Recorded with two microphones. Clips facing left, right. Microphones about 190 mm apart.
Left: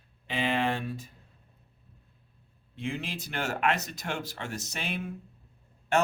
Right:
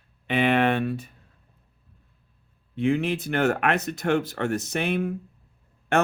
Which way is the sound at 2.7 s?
60° right (ahead or behind).